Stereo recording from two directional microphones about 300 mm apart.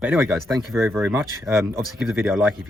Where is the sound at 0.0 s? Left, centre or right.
Centre.